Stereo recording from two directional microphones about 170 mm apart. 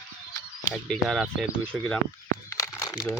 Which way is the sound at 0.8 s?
Centre (ahead or behind).